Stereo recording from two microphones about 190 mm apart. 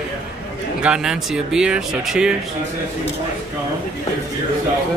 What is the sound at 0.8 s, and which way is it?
Speech, 5° right (ahead or behind).